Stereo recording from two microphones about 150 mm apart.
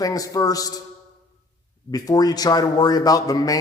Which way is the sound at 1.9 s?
25° left (ahead or behind).